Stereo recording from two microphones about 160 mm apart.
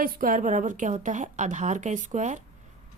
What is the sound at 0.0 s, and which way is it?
A woman's voice, 60° right (ahead or behind).